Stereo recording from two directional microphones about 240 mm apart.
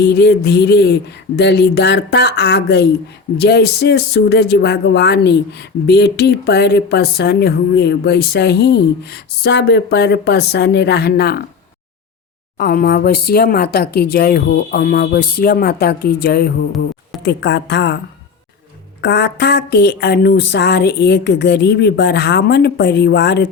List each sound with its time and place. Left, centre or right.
0.0 s speech: left
12.5 s speech: left
19.0 s speech: left